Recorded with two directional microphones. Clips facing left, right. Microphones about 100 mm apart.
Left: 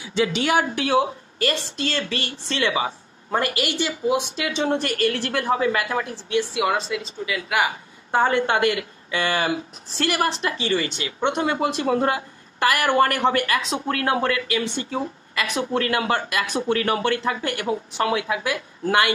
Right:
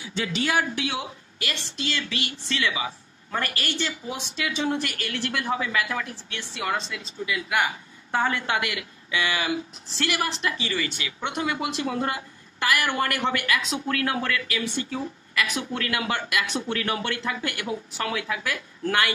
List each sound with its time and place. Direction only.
0.3 s speech: 70° left (ahead or behind); by 3.3 s 35° left (ahead or behind)
3.3 s speech: 20° left (ahead or behind)
6.3 s a woman's voice: 15° left (ahead or behind)
6.9 s speech: centre (ahead or behind)
8.1 s a woman's voice: 25° left (ahead or behind)